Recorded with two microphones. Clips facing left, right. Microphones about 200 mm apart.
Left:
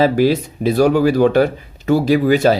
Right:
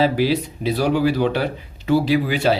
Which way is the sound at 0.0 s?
50° left (ahead or behind).